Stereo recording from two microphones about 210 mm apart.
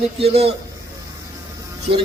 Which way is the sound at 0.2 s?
30° right (ahead or behind).